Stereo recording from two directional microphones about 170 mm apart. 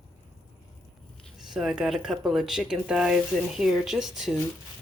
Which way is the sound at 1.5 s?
5° right (ahead or behind).